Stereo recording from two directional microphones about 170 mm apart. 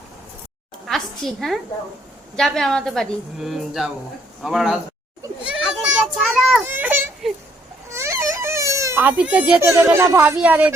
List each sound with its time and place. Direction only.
0.9 s a sound: centre (ahead or behind)
2.3 s a woman's voice: centre (ahead or behind)
5.5 s children playing: centre (ahead or behind)
7.9 s speech: 15° right (ahead or behind)